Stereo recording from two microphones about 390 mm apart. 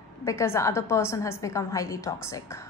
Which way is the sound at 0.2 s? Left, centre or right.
Centre.